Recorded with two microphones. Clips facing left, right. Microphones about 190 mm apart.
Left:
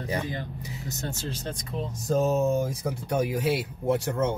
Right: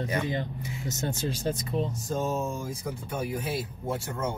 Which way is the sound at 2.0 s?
65° left (ahead or behind).